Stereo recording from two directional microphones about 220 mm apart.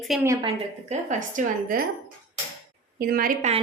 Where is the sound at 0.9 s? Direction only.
35° right (ahead or behind).